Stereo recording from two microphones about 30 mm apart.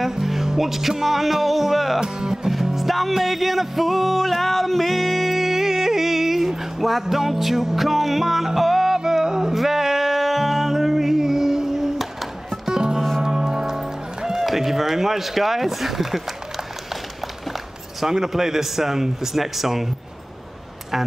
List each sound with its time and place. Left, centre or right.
0.1 s music: centre
2.0 s speech: right
2.5 s music: centre
12.6 s music: centre
14.4 s speech: centre
18.1 s music: centre